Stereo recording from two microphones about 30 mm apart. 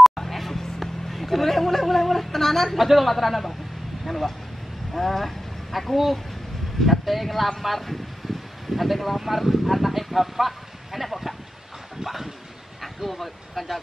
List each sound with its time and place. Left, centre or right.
0.0 s a sound: centre
1.2 s speech: centre
12.8 s speech: centre